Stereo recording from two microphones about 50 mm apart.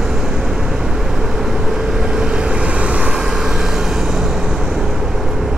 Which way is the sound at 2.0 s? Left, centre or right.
Right.